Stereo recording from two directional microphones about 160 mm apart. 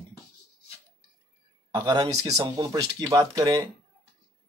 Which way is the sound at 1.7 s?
25° right (ahead or behind).